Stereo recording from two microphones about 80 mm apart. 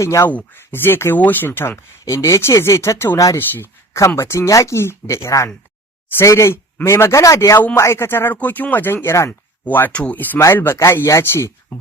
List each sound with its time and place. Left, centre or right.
0.0 s speech: left
0.3 s speech: left
2.0 s speech: left
3.9 s speech: left
8.4 s speech: centre